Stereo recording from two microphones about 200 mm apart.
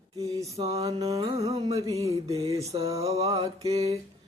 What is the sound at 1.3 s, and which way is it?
Music, 30° right (ahead or behind).